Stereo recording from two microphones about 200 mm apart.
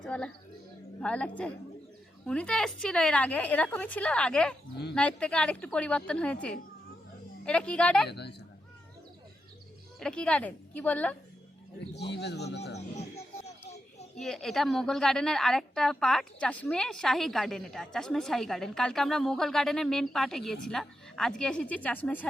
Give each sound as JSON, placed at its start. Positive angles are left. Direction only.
{"t": 0.0, "sound": "a woman's voice", "side_deg": 5}
{"t": 8.0, "sound": "speech", "side_deg": 55}
{"t": 10.0, "sound": "a woman's voice", "side_deg": 5}
{"t": 11.8, "sound": "speech", "side_deg": 60}
{"t": 14.2, "sound": "a woman's voice", "side_deg": 0}